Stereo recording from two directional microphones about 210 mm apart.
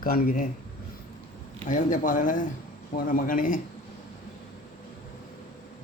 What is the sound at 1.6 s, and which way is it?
A man's voice, 40° left (ahead or behind).